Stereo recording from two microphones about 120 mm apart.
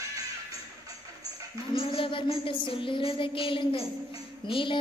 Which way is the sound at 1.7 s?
50° left (ahead or behind).